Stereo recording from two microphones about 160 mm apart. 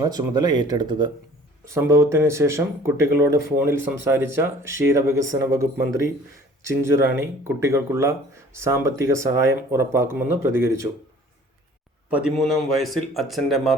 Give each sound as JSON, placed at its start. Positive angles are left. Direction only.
{"t": 0.0, "sound": "speech", "side_deg": -25}
{"t": 1.6, "sound": "speech", "side_deg": -15}
{"t": 12.1, "sound": "a man's voice", "side_deg": 0}